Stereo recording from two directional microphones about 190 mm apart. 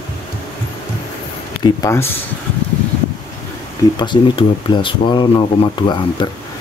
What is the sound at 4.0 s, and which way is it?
Speech, 25° left (ahead or behind).